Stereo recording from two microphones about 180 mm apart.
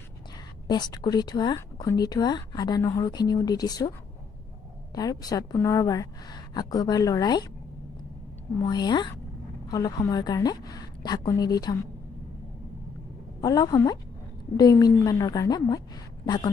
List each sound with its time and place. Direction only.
0.7 s a woman's voice: 25° left (ahead or behind)
4.9 s a woman's voice: 20° left (ahead or behind)
8.5 s a woman's voice: 20° left (ahead or behind)
13.4 s a woman's voice: 20° left (ahead or behind)